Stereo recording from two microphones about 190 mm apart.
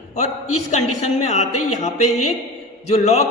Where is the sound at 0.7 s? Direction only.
40° left (ahead or behind).